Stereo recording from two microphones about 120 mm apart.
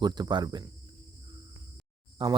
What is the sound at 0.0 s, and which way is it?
Speech, 35° right (ahead or behind).